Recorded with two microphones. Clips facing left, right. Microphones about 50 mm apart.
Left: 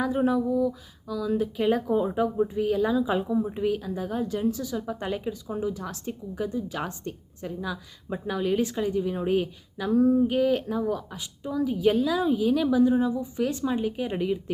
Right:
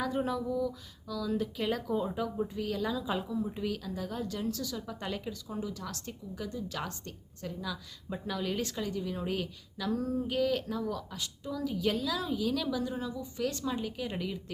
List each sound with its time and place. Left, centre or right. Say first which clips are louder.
0.0 s speech: left 8 dB; centre